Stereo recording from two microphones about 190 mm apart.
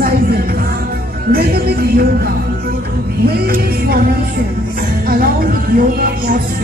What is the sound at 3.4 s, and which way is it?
Music, 50° right (ahead or behind).